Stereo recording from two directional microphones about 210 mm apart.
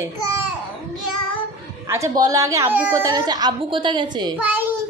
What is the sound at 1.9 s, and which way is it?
A child's voice, 15° right (ahead or behind).